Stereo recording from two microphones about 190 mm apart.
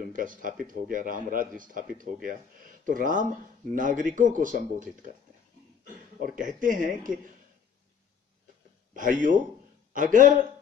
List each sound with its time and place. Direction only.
0.0 s speech: 45° right (ahead or behind)
6.3 s speech: 45° right (ahead or behind)
8.9 s speech: 45° right (ahead or behind)